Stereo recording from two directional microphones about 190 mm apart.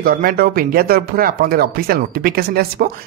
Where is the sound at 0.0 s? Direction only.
50° right (ahead or behind).